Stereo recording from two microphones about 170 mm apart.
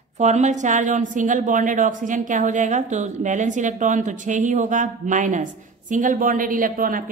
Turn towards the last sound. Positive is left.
turn(degrees=-55)  # may be behind; listen again after turning